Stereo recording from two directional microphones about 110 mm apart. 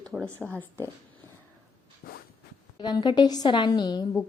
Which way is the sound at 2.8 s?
40° left (ahead or behind).